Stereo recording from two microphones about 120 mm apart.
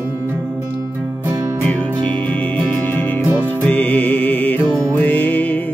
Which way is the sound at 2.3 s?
10° left (ahead or behind).